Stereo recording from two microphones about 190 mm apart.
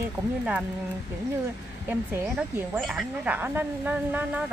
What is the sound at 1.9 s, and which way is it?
Speech, 10° right (ahead or behind).